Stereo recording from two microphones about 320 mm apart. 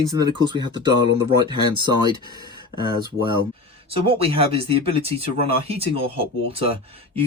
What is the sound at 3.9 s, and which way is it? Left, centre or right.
Speech, centre.